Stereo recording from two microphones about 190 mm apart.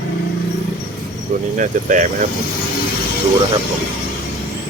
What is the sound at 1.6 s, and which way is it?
Speech, 40° right (ahead or behind).